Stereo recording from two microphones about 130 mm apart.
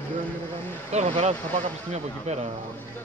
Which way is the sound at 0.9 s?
60° right (ahead or behind).